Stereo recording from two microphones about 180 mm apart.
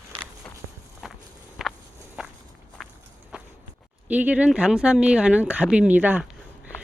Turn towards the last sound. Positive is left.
turn(degrees=-5)  # may be behind; listen again after turning